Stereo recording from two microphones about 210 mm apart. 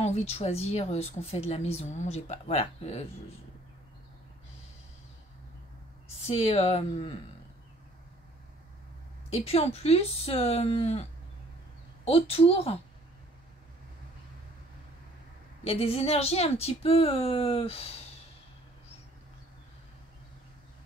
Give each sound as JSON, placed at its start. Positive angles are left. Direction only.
{"t": 0.0, "sound": "a woman's voice", "side_deg": 30}
{"t": 6.1, "sound": "a woman's voice", "side_deg": 30}
{"t": 9.3, "sound": "a woman's voice", "side_deg": 30}
{"t": 15.6, "sound": "a woman's voice", "side_deg": 30}